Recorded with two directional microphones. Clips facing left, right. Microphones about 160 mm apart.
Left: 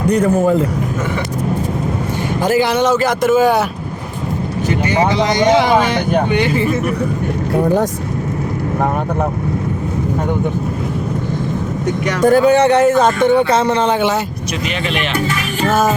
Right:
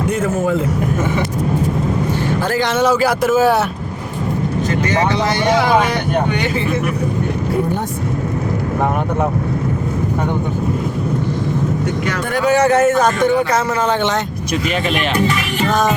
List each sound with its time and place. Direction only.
0.1 s a man's voice: 35° left (ahead or behind)
2.4 s speech: 15° left (ahead or behind)
2.7 s speech: 5° right (ahead or behind)
4.9 s speech: 15° left (ahead or behind)
12.2 s speech: 30° left (ahead or behind)